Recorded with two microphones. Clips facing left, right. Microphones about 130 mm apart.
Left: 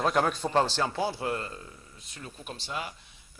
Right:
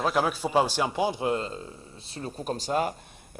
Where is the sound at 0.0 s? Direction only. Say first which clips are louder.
Right 1 dB; 5° right (ahead or behind); by 2.9 s 45° right (ahead or behind).